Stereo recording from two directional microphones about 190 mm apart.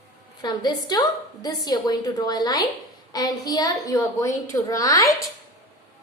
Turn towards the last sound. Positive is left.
turn(degrees=15)  # may be behind; listen again after turning